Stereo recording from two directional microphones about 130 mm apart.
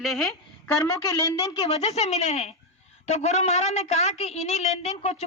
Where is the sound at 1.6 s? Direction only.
55° left (ahead or behind).